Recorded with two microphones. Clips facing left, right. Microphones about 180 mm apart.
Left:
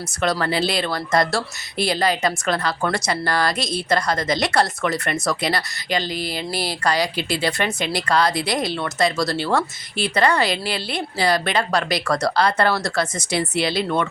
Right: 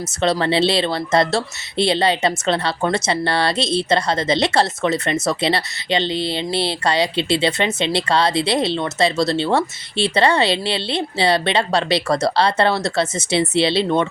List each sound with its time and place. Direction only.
0.2 s speech: 25° right (ahead or behind)